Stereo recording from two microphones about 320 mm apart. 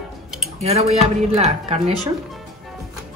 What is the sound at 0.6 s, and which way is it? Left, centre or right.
Speech, centre.